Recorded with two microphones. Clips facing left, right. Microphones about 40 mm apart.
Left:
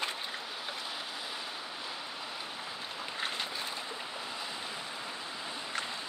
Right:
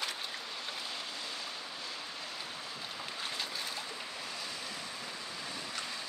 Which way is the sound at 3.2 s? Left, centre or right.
Left.